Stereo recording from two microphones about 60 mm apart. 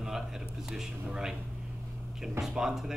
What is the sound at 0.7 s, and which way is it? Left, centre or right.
Speech, centre.